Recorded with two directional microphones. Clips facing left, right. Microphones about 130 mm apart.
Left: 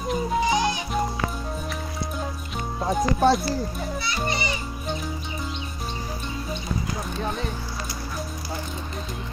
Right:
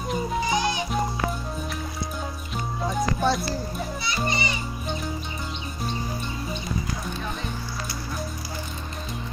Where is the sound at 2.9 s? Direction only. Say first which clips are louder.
Left 5 dB; 45° left (ahead or behind).